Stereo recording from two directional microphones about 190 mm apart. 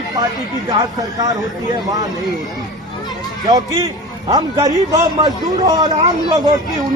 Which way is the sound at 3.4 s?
20° right (ahead or behind).